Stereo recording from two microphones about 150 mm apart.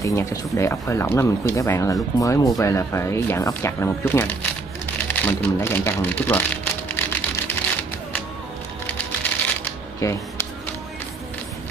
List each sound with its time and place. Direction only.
0.0 s speech: 20° left (ahead or behind)
5.2 s a sound: 15° left (ahead or behind)
8.8 s music: 10° left (ahead or behind)
10.0 s speech: 20° left (ahead or behind)